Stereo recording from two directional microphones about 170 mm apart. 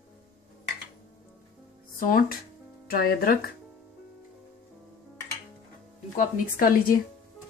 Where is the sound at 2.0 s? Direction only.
55° left (ahead or behind).